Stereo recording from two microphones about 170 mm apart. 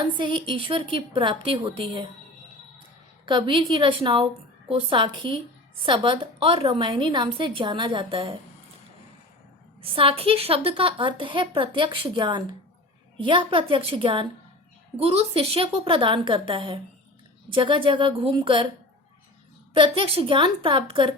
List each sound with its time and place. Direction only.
0.2 s a woman's voice: 30° right (ahead or behind)
3.2 s a woman's voice: 30° right (ahead or behind)
9.8 s a woman's voice: 30° right (ahead or behind)
19.7 s a woman's voice: 30° right (ahead or behind)